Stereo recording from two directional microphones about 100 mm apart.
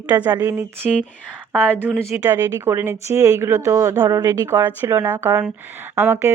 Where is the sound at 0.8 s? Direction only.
5° right (ahead or behind).